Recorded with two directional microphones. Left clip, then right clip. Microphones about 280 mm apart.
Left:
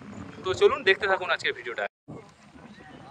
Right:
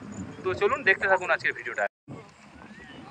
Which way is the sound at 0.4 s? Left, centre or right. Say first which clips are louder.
Left 3 dB; centre.